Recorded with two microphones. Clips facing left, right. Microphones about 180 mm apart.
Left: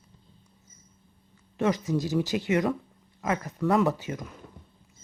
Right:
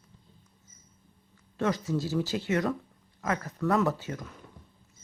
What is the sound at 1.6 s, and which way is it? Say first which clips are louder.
Speech: left 3 dB; 15° left (ahead or behind).